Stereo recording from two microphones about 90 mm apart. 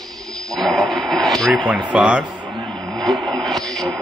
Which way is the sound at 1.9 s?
10° right (ahead or behind).